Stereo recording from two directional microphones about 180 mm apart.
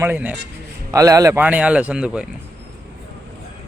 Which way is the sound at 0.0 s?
10° right (ahead or behind).